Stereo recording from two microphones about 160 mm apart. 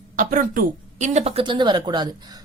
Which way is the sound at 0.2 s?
55° right (ahead or behind).